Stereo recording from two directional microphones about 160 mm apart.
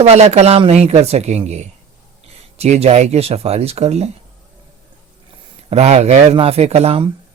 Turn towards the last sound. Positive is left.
turn(degrees=-35)  # may be behind; listen again after turning